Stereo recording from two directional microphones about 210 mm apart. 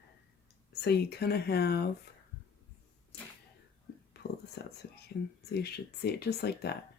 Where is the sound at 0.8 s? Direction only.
50° left (ahead or behind).